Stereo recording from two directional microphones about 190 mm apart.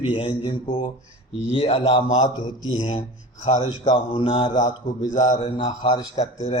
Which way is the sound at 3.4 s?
35° left (ahead or behind).